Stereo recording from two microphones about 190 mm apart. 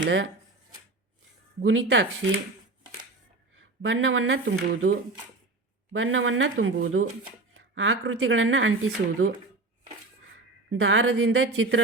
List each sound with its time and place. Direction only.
0.0 s speech: 75° right (ahead or behind)
1.6 s speech: 90° right
3.8 s speech: 90° right
10.7 s speech: 90° right